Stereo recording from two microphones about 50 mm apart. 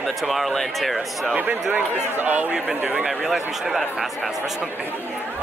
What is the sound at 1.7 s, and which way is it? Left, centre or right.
Speech, right.